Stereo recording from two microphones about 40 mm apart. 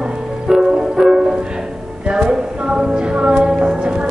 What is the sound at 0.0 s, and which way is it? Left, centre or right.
Music, centre.